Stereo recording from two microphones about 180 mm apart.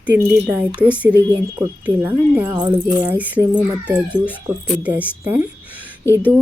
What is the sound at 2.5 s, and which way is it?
Speech, 25° right (ahead or behind).